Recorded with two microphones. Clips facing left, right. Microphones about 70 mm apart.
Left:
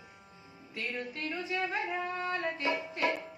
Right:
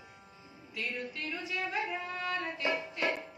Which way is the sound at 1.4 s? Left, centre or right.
Left.